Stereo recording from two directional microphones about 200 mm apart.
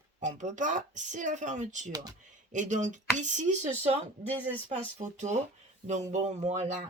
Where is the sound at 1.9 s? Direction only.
20° right (ahead or behind).